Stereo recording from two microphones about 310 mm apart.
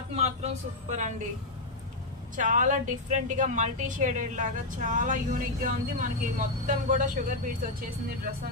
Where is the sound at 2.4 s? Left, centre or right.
Right.